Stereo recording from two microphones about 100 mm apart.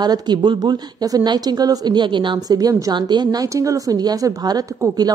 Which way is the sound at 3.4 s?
30° right (ahead or behind).